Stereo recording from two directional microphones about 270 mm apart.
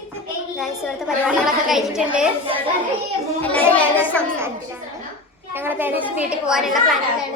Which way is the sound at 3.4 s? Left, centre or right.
Centre.